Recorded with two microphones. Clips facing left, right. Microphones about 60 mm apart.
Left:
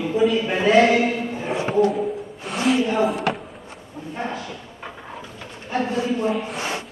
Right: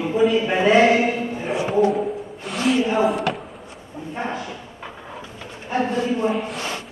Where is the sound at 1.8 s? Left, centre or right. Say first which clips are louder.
Right 1 dB; centre.